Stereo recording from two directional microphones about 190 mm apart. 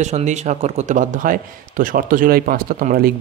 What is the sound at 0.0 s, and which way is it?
Speech, 40° right (ahead or behind).